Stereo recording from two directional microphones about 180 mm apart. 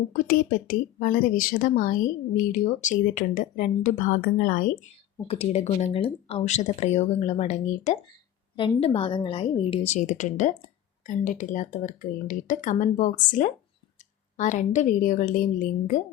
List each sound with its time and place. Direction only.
0.1 s speech: 50° left (ahead or behind)
5.3 s speech: 35° left (ahead or behind)